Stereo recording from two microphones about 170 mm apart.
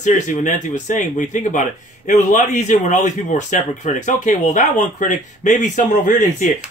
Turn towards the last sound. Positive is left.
turn(degrees=45)  # may be behind; listen again after turning